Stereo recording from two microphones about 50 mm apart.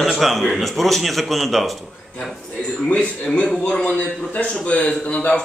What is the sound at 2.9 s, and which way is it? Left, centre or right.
A man's voice, left.